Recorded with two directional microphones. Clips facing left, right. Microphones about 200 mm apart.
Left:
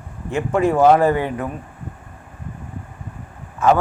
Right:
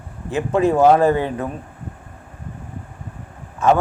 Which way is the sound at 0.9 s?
10° left (ahead or behind).